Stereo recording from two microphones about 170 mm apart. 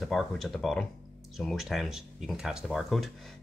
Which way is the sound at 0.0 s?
Centre (ahead or behind).